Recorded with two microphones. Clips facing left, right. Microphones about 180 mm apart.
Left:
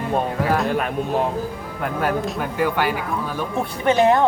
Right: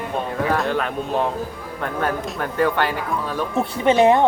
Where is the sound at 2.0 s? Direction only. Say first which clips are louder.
Left 2 dB; 5° left (ahead or behind).